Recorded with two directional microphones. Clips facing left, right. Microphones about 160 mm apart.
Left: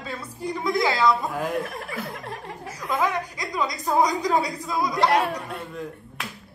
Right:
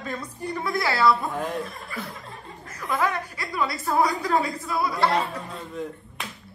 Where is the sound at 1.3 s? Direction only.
Centre (ahead or behind).